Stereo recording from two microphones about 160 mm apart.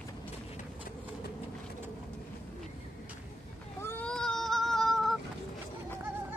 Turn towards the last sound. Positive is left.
turn(degrees=0)  # may be behind; listen again after turning